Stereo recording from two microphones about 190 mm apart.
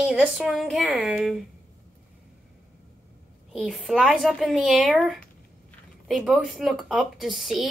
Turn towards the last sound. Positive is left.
turn(degrees=0)  # may be behind; listen again after turning